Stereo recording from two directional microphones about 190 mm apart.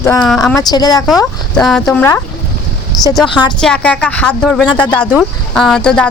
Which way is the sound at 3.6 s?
5° left (ahead or behind).